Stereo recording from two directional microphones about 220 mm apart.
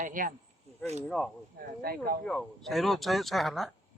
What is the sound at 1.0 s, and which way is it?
Speech, 5° left (ahead or behind).